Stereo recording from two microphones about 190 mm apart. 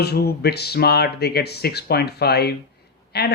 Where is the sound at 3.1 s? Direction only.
60° left (ahead or behind).